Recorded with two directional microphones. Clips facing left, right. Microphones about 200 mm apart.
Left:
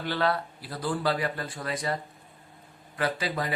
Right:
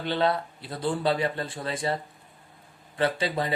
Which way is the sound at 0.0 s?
25° right (ahead or behind).